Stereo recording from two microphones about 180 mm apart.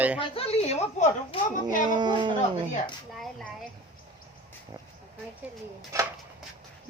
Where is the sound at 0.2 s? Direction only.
35° left (ahead or behind).